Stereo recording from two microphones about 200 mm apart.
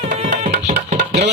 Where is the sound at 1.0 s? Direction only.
60° right (ahead or behind).